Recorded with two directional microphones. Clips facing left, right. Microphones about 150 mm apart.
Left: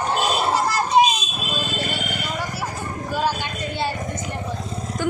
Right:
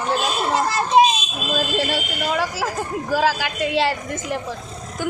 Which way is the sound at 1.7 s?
90° right.